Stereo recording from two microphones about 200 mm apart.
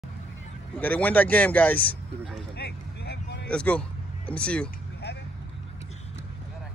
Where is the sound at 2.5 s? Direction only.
55° left (ahead or behind).